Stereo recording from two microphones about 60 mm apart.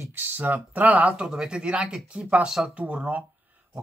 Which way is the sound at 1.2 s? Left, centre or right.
Centre.